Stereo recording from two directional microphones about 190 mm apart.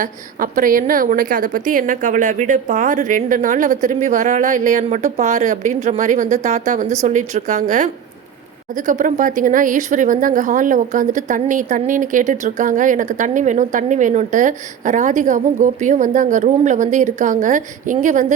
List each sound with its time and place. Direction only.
0.0 s speech: 45° right (ahead or behind)